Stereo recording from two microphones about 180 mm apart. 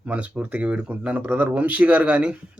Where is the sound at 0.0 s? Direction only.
5° right (ahead or behind).